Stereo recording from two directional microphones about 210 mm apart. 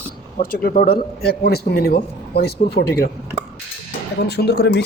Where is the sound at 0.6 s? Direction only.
45° left (ahead or behind).